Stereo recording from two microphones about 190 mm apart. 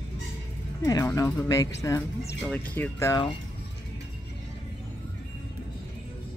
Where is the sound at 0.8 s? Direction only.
15° left (ahead or behind).